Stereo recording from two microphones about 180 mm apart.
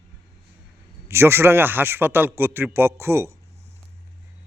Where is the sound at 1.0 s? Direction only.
15° right (ahead or behind).